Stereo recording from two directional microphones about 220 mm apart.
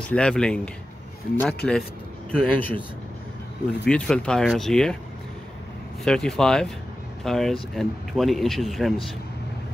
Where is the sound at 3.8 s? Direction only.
5° left (ahead or behind).